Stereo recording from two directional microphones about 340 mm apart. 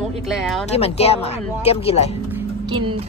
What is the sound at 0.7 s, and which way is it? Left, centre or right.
Speech, centre.